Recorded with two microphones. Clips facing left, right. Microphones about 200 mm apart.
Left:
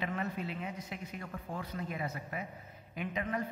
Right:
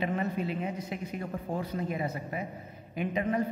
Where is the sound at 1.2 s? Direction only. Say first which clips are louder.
Right 8 dB; 30° right (ahead or behind).